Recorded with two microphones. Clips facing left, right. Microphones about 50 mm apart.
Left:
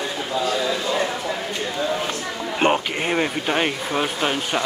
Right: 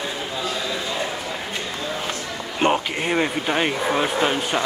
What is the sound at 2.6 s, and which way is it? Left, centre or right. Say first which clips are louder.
A man's voice: even; centre.